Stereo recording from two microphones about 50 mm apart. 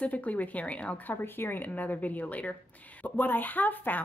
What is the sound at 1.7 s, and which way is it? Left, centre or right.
A woman's voice, left.